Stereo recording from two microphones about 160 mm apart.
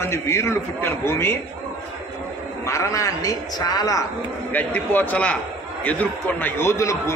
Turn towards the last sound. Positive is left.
turn(degrees=20)  # may be behind; listen again after turning